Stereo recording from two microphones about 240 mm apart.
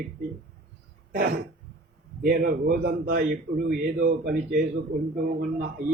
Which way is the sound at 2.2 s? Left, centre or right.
Right.